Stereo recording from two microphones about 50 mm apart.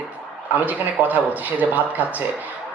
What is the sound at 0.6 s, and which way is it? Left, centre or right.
Speech, right.